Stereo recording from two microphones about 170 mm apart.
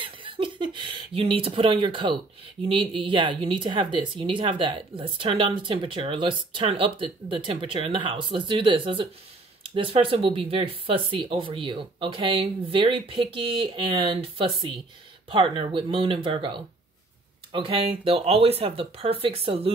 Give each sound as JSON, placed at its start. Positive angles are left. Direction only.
{"t": 0.0, "sound": "a woman's voice", "side_deg": -30}
{"t": 15.2, "sound": "speech", "side_deg": -30}